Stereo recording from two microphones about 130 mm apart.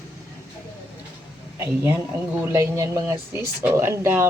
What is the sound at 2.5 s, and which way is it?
Speech, 20° right (ahead or behind).